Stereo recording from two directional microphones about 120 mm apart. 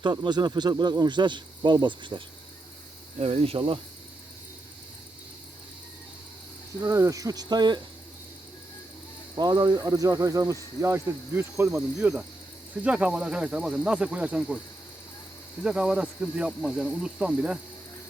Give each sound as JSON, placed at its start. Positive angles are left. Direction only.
{"t": 0.0, "sound": "speech", "side_deg": -40}
{"t": 3.2, "sound": "cricket", "side_deg": -60}
{"t": 6.8, "sound": "speech", "side_deg": -25}
{"t": 9.4, "sound": "speech", "side_deg": -35}
{"t": 11.9, "sound": "speech", "side_deg": -10}
{"t": 15.6, "sound": "speech", "side_deg": -5}
{"t": 16.5, "sound": "cricket", "side_deg": 5}
{"t": 17.0, "sound": "speech", "side_deg": -5}